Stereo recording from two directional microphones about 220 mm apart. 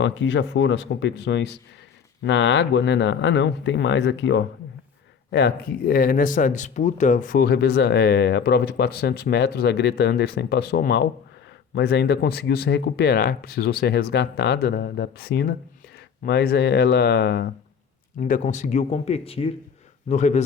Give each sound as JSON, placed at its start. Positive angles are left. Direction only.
{"t": 0.0, "sound": "speech", "side_deg": 55}
{"t": 18.2, "sound": "speech", "side_deg": 35}